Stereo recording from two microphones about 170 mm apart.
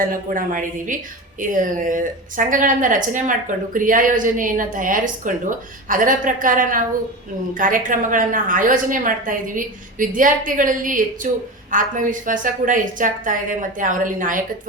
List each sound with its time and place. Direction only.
0.0 s a woman's voice: 55° right (ahead or behind)